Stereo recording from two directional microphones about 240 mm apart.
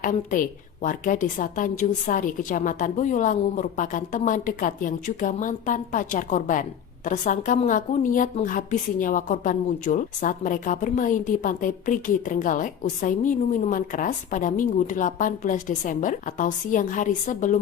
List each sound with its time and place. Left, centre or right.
0.0 s a woman's voice: left